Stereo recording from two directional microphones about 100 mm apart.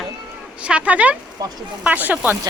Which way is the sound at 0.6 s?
10° right (ahead or behind).